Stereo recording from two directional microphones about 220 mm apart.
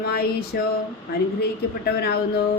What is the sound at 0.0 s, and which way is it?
Speech, 45° left (ahead or behind).